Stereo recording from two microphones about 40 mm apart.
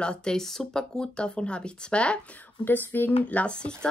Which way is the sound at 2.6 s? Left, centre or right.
Left.